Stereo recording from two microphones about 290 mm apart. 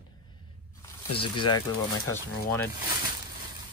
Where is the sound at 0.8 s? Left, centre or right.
Centre.